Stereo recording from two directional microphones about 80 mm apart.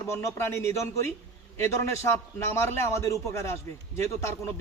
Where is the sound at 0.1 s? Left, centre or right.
Left.